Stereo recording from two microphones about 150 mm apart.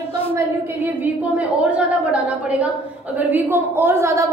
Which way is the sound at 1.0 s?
10° right (ahead or behind).